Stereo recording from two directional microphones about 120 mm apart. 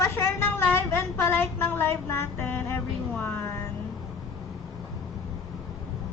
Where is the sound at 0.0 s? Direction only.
20° left (ahead or behind).